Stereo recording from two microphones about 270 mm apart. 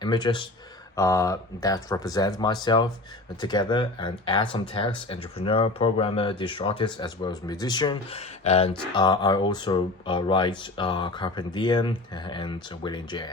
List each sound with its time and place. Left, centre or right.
0.0 s speech: centre